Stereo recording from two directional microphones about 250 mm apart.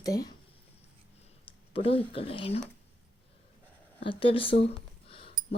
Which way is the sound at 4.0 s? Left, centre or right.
Left.